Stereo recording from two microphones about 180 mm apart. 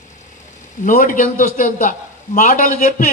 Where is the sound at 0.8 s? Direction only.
50° left (ahead or behind).